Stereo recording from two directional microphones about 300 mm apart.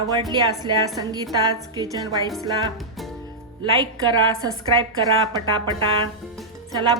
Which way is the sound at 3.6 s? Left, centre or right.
Centre.